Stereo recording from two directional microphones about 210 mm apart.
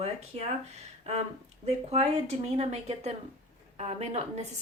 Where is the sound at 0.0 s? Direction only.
30° right (ahead or behind).